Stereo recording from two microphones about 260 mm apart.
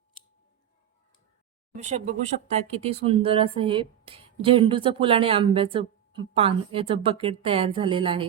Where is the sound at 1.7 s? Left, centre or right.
Right.